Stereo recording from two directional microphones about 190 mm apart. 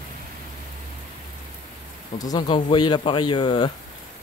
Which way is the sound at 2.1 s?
20° left (ahead or behind).